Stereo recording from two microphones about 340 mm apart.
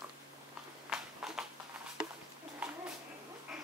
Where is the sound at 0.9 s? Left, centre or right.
Centre.